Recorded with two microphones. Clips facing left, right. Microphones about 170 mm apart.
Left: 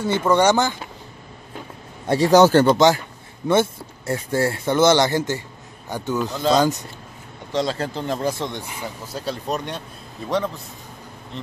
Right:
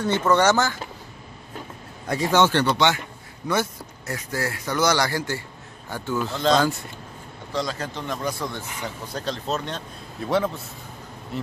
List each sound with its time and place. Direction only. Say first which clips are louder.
0.0 s speech: left 2 dB; 10° left (ahead or behind)
2.0 s speech: left 6 dB; 35° left (ahead or behind)
3.4 s speech: left 6 dB; 25° left (ahead or behind)
7.5 s speech: left 5 dB; 30° left (ahead or behind)
8.8 s speech: even; 5° left (ahead or behind)
10.2 s a man's voice: right 1 dB; centre (ahead or behind)
11.3 s bee: right 4 dB; 5° right (ahead or behind)